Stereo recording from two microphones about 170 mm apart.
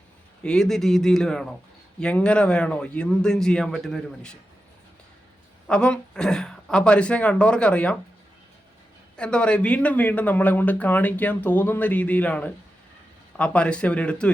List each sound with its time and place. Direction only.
0.4 s speech: 5° left (ahead or behind)
5.6 s speech: 5° left (ahead or behind)
9.1 s speech: 5° left (ahead or behind)